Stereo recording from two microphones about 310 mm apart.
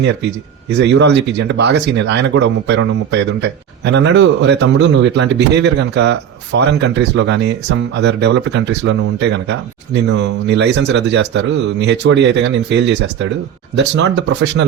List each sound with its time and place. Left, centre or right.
0.0 s speech: right